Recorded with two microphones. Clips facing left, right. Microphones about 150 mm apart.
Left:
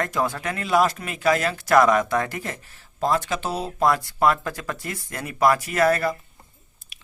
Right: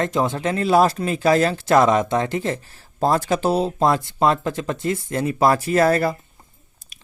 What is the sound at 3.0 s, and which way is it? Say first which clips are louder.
Speech: right 4 dB; 35° right (ahead or behind).